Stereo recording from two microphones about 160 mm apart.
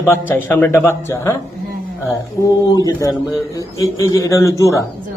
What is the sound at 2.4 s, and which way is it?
Speech, 20° left (ahead or behind).